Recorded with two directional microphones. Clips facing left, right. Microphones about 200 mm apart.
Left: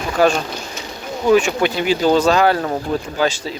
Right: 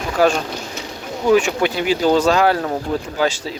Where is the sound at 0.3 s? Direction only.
60° right (ahead or behind).